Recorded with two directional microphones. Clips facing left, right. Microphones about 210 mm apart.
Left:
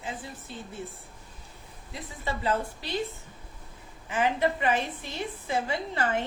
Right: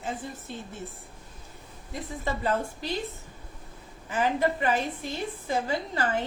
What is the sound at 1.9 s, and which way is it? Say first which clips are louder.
A woman's voice: right 3 dB; 45° right (ahead or behind).